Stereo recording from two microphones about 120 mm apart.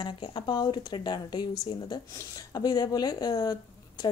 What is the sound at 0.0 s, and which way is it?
Speech, 40° left (ahead or behind).